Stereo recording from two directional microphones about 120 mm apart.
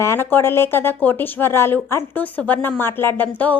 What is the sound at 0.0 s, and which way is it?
Speech, 20° left (ahead or behind).